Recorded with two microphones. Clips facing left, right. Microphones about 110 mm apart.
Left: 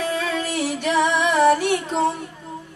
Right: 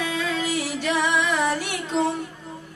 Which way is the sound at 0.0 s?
45° left (ahead or behind).